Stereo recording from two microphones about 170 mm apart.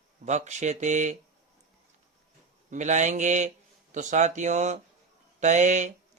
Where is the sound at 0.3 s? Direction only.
45° right (ahead or behind).